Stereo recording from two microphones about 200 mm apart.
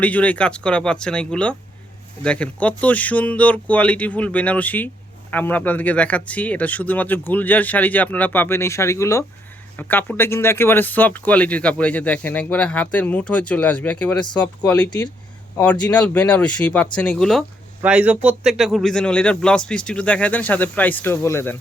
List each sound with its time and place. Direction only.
0.0 s speech: 5° left (ahead or behind)
14.7 s speech: 20° left (ahead or behind)
15.5 s speech: 5° left (ahead or behind)